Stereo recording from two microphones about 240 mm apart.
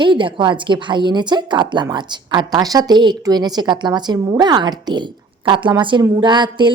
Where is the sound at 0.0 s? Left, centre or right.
Centre.